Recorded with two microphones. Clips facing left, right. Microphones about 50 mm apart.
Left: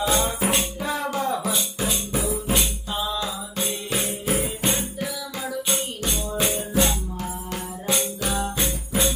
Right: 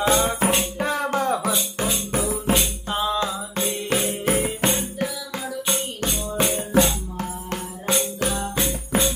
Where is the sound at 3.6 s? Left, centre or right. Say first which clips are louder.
Right 4 dB; right.